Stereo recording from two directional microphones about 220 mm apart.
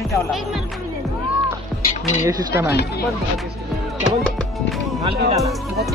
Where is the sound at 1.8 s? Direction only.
35° left (ahead or behind).